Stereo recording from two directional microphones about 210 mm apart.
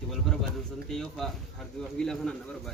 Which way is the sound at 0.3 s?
Centre (ahead or behind).